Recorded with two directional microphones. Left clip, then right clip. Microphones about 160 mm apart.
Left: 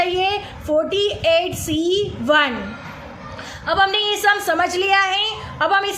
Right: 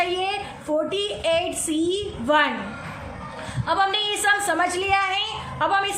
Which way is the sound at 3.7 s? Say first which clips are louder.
Left 4 dB; 25° left (ahead or behind).